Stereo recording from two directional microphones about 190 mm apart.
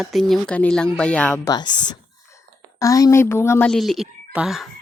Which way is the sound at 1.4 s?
20° left (ahead or behind).